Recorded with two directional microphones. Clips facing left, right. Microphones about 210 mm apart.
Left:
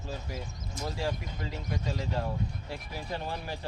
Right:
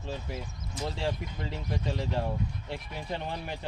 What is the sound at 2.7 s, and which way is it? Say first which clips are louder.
Speech: right 1 dB; 20° right (ahead or behind).